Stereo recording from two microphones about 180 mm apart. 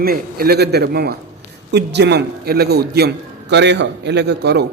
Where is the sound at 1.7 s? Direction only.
70° right (ahead or behind).